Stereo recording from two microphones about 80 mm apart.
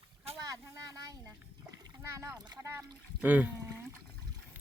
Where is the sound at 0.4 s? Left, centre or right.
Right.